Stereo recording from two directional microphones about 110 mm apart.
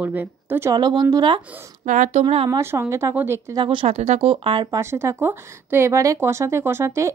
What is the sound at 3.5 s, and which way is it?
Speech, 50° right (ahead or behind).